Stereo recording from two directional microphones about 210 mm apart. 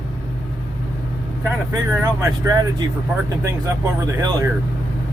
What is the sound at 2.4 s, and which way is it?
Speech, 15° right (ahead or behind).